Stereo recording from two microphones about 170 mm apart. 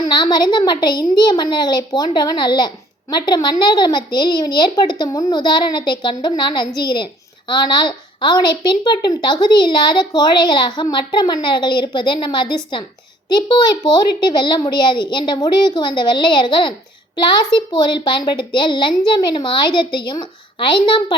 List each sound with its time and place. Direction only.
0.1 s a child's voice: 25° left (ahead or behind)